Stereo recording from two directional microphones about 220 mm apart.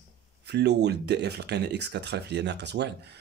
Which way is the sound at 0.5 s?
50° right (ahead or behind).